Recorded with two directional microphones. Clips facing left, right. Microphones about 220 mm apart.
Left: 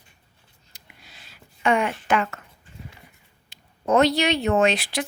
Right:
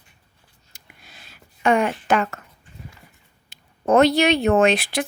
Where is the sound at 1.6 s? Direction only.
40° right (ahead or behind).